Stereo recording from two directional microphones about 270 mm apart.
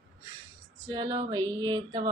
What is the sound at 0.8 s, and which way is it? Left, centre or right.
Speech, centre.